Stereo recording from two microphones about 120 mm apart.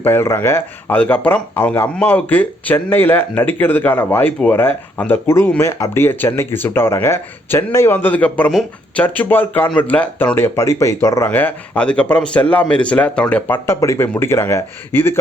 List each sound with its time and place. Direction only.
0.0 s speech: 20° left (ahead or behind)
13.7 s speech: 25° left (ahead or behind)